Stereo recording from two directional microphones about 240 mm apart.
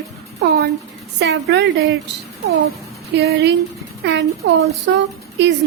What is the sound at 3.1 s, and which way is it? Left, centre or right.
Speech, right.